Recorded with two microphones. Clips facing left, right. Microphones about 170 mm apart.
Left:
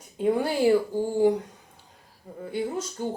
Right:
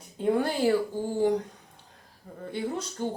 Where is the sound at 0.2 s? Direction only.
10° left (ahead or behind).